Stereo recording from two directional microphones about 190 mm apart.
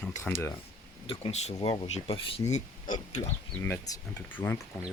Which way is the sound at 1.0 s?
30° left (ahead or behind).